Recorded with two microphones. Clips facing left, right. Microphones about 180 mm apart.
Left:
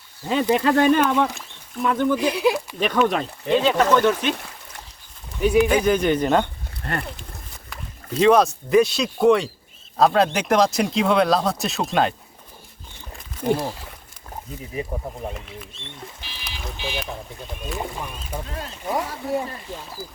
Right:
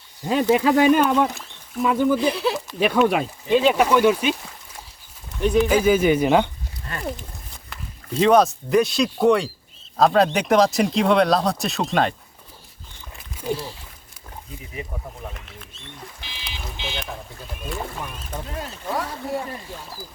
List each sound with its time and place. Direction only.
0.5 s speech: 5° right (ahead or behind)
2.1 s speech: 15° left (ahead or behind)
2.7 s speech: 10° right (ahead or behind)
5.4 s speech: 5° left (ahead or behind)
5.6 s speech: 5° right (ahead or behind)
6.8 s speech: 65° left (ahead or behind)
7.7 s a sound: centre (ahead or behind)
8.2 s speech: centre (ahead or behind)
13.4 s speech: 55° left (ahead or behind)
16.2 s boat: 15° right (ahead or behind)
16.8 s speech: 10° left (ahead or behind)
17.4 s speech: centre (ahead or behind)
17.7 s speech: 15° left (ahead or behind)
18.9 s speech: 20° left (ahead or behind)